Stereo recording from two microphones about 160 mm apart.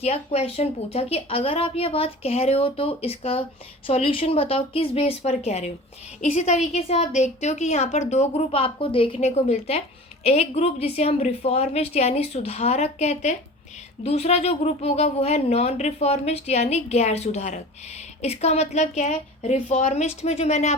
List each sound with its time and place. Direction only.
0.0 s a woman's voice: 40° left (ahead or behind)